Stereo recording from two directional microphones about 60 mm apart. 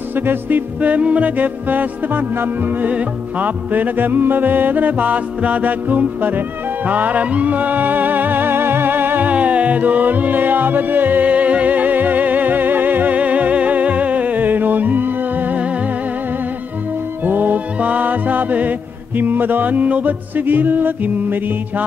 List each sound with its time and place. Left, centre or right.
0.1 s music: right
2.9 s music: right
9.3 s music: right
17.2 s music: right